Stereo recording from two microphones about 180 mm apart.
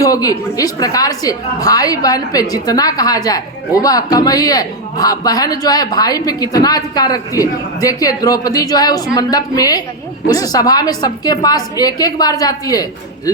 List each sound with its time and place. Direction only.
0.0 s a woman's voice: 20° left (ahead or behind)